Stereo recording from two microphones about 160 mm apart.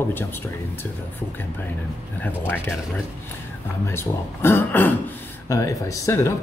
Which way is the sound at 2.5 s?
15° left (ahead or behind).